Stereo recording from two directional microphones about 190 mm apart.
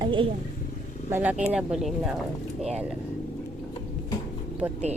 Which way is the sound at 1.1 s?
10° right (ahead or behind).